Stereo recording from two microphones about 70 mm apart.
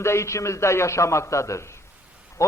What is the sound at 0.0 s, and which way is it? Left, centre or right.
A man's voice, left.